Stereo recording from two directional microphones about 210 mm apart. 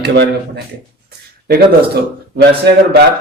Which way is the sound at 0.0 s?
50° right (ahead or behind).